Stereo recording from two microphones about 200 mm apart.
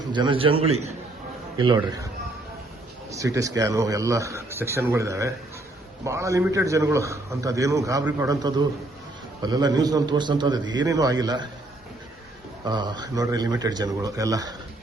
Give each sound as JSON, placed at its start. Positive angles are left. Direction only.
{"t": 0.1, "sound": "a man's voice", "side_deg": -25}
{"t": 3.1, "sound": "speech", "side_deg": -15}
{"t": 9.4, "sound": "a man's voice", "side_deg": -20}
{"t": 12.6, "sound": "a man's voice", "side_deg": -20}